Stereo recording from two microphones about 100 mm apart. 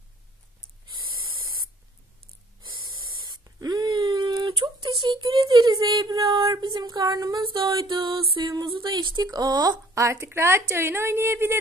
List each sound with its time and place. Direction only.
2.7 s spray: 50° right (ahead or behind)
7.4 s a sound: 55° right (ahead or behind)
8.5 s speech: 55° right (ahead or behind)
9.9 s speech: 30° right (ahead or behind)